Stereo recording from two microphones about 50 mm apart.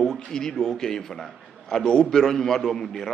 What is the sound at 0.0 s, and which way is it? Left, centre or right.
A man's voice, centre.